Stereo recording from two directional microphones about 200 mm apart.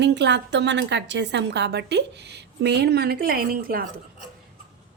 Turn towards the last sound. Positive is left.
turn(degrees=-50)  # may be behind; listen again after turning